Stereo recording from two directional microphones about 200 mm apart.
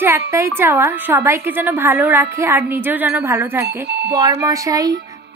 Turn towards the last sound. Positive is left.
turn(degrees=-20)  # may be behind; listen again after turning